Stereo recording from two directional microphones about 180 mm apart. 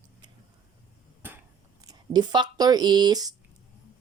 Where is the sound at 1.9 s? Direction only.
25° right (ahead or behind).